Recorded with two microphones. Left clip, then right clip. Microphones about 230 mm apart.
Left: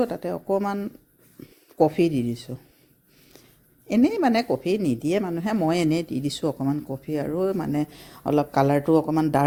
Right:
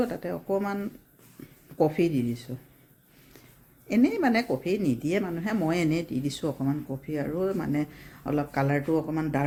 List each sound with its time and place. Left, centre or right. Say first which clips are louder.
0.0 s speech: left 4 dB; left
3.8 s speech: left 3 dB; left